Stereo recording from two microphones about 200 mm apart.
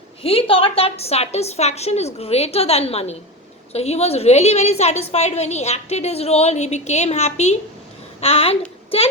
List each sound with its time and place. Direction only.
0.2 s a woman's voice: 30° left (ahead or behind)